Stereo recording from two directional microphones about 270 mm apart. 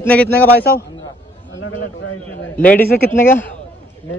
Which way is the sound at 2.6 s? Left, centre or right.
Left.